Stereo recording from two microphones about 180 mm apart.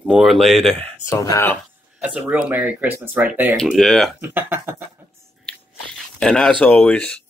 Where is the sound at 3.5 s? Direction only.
5° left (ahead or behind).